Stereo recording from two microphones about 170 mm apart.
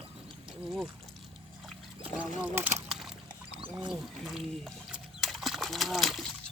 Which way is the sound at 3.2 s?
30° right (ahead or behind).